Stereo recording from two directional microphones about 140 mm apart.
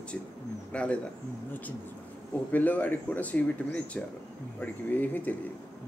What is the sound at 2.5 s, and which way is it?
Speech, 10° left (ahead or behind).